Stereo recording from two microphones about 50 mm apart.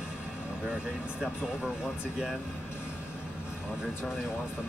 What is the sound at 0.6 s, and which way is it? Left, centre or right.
Speech, right.